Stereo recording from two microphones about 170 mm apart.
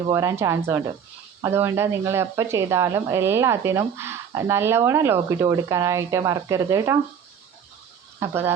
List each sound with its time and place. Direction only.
0.1 s speech: 15° right (ahead or behind)
8.2 s speech: 15° right (ahead or behind)